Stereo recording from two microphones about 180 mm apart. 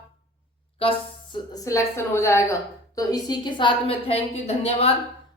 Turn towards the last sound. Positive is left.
turn(degrees=35)  # may be behind; listen again after turning